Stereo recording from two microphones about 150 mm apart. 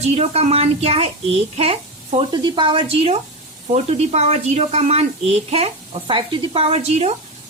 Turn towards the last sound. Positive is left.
turn(degrees=-45)  # may be behind; listen again after turning